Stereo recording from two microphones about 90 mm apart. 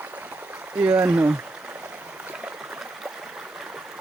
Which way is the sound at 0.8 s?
20° right (ahead or behind).